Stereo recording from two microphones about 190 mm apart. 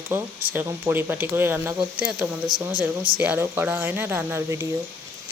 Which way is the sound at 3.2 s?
10° right (ahead or behind).